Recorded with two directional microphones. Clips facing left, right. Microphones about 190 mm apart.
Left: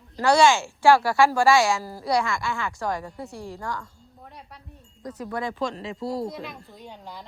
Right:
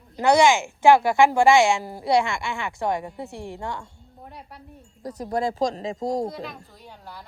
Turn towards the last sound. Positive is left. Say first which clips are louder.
# right 1 dB
turn(degrees=0)  # may be behind; listen again after turning